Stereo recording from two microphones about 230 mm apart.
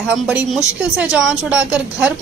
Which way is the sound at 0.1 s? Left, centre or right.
Centre.